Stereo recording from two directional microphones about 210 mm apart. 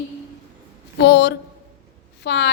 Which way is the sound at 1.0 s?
55° left (ahead or behind).